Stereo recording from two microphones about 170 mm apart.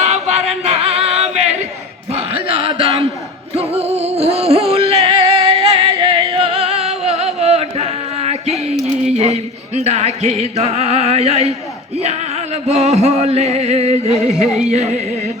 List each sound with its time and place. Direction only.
0.0 s singing: 40° right (ahead or behind)
2.1 s a sound: 35° right (ahead or behind)
3.5 s music: 35° right (ahead or behind)
8.7 s a sound: centre (ahead or behind)
9.1 s music: 40° right (ahead or behind)
12.6 s music: 40° right (ahead or behind)